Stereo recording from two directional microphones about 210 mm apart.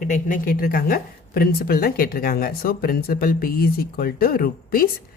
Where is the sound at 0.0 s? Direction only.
40° left (ahead or behind).